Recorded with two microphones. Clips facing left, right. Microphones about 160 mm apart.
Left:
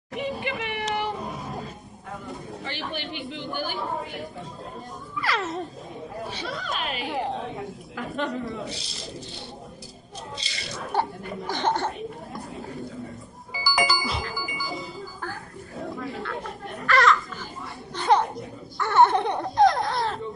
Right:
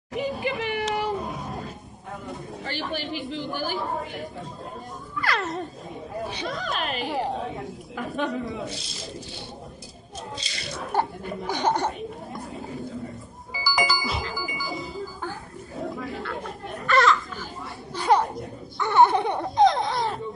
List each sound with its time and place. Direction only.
0.1 s a sound: centre (ahead or behind)
3.0 s speech: centre (ahead or behind)
6.4 s speech: 45° right (ahead or behind)
7.0 s speech: centre (ahead or behind)
10.3 s speech: centre (ahead or behind)
11.4 s speech: 10° right (ahead or behind)
12.6 s a sound: centre (ahead or behind)
13.5 s bicycle bell: centre (ahead or behind)
15.8 s roaring cats: centre (ahead or behind)
16.9 s children playing: centre (ahead or behind)
17.9 s a sound: 5° right (ahead or behind)
18.8 s a sound: 15° right (ahead or behind); by 20.0 s centre (ahead or behind)